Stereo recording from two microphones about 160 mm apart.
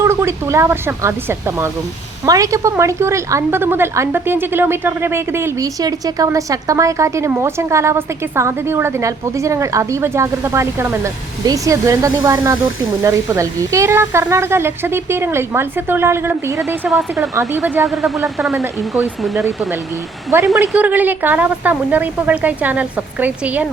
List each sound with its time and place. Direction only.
0.0 s a woman's voice: 15° right (ahead or behind)
16.9 s speech: 5° right (ahead or behind)
20.3 s a woman's voice: 15° right (ahead or behind)